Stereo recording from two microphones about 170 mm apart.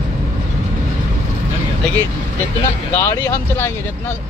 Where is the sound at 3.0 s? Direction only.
15° left (ahead or behind).